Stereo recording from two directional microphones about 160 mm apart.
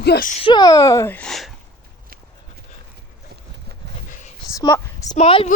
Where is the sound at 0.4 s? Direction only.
25° left (ahead or behind); by 1.5 s centre (ahead or behind).